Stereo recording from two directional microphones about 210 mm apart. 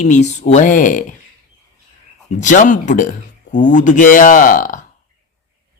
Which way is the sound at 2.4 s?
35° left (ahead or behind).